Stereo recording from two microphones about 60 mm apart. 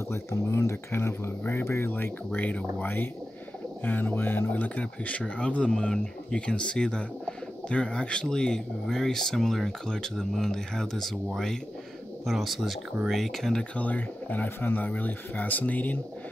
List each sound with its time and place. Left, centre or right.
0.3 s speech: left
1.9 s speech: left; by 11.1 s centre
12.3 s speech: centre
13.7 s speech: left